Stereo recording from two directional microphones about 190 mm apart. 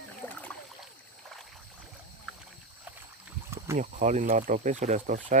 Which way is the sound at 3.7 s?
40° right (ahead or behind).